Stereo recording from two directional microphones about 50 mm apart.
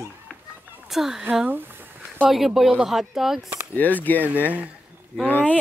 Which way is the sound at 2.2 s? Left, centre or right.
Centre.